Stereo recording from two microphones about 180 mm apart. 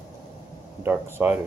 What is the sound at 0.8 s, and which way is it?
Speech, 10° right (ahead or behind).